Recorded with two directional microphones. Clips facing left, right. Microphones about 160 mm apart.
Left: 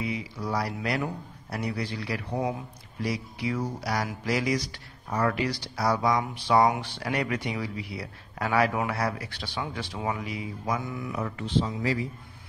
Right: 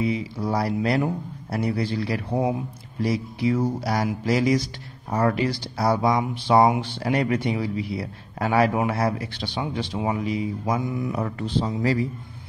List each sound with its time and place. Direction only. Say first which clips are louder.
0.0 s speech: right 7 dB; 30° right (ahead or behind)
11.1 s speech: right 2 dB; 40° right (ahead or behind)